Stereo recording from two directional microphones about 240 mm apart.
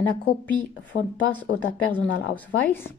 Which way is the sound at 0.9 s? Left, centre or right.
Left.